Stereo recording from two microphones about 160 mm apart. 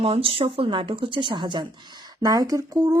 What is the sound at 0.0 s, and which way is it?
Speech, 35° right (ahead or behind).